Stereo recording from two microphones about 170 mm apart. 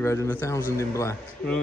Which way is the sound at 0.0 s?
15° left (ahead or behind).